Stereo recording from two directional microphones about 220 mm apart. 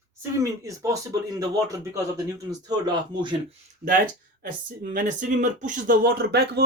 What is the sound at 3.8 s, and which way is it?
Speech, 40° right (ahead or behind).